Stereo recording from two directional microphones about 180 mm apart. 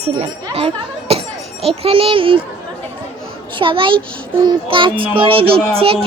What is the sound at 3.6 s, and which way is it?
A child's voice, 30° right (ahead or behind).